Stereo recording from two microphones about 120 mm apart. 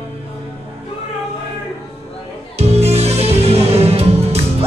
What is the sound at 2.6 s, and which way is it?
Music, 60° right (ahead or behind).